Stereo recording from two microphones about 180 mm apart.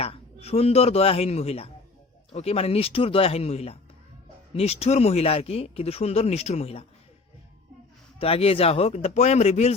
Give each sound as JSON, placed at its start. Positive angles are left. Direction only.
{"t": 0.0, "sound": "a man's voice", "side_deg": 35}
{"t": 8.2, "sound": "speech", "side_deg": 30}